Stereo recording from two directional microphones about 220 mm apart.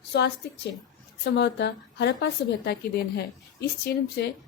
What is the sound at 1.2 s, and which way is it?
A woman's voice, 50° left (ahead or behind).